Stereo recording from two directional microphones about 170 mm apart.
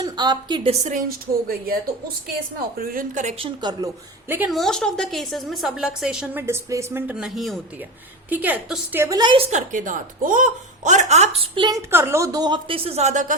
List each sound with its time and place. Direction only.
0.0 s a woman's voice: 25° right (ahead or behind); by 3.3 s 50° right (ahead or behind)
3.3 s a woman's voice: 30° right (ahead or behind)
4.4 s a woman's voice: centre (ahead or behind); by 9.5 s 30° right (ahead or behind)
9.5 s a woman's voice: 45° right (ahead or behind); by 11.8 s 30° right (ahead or behind)
11.9 s a woman's voice: 15° right (ahead or behind); by 13.3 s 45° right (ahead or behind)